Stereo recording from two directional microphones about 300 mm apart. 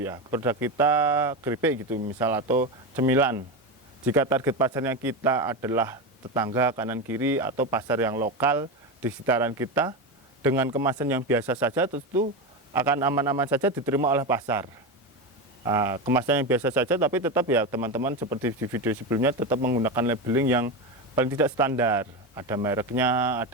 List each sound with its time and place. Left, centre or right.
0.0 s a man's voice: centre
11.9 s speech: right
12.7 s a man's voice: centre